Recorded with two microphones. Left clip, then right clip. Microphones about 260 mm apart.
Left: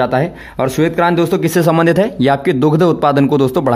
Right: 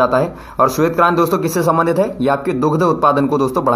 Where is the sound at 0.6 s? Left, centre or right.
Left.